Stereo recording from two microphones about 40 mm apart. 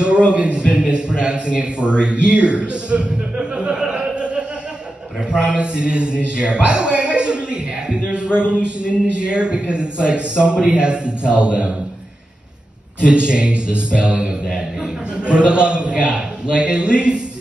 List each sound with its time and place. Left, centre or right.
0.3 s a man's voice: right
2.2 s a sound: right
5.3 s a man's voice: right
7.9 s a sound: right
8.4 s a man's voice: right
13.0 s a man's voice: right